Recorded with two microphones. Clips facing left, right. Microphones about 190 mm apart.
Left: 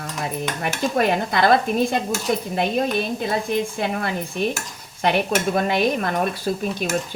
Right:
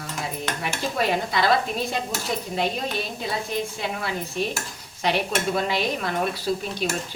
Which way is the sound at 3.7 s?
55° left (ahead or behind).